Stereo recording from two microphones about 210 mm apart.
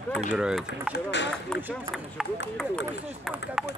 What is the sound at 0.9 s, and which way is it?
Speech, 55° left (ahead or behind).